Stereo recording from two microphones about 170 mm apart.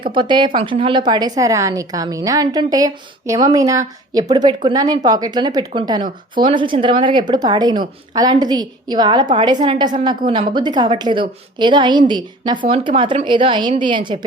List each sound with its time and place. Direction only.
0.0 s a woman's voice: 30° right (ahead or behind)